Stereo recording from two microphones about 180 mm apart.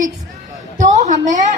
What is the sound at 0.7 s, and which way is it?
Speech, 40° right (ahead or behind).